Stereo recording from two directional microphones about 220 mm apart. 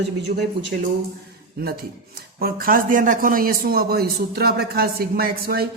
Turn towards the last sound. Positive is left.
turn(degrees=-45)  # may be behind; listen again after turning